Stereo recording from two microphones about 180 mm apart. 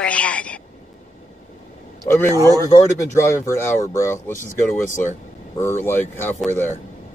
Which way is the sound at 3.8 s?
15° left (ahead or behind).